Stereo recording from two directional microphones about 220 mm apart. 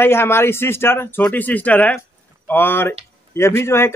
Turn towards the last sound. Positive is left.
turn(degrees=10)  # may be behind; listen again after turning